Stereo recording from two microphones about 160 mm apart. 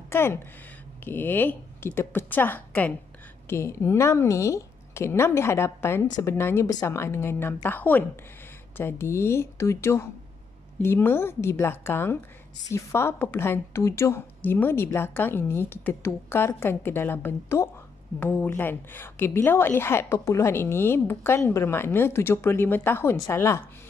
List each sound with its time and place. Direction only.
0.1 s a woman's voice: 15° left (ahead or behind)